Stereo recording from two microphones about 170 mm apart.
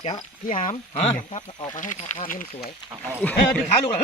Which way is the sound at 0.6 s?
45° left (ahead or behind).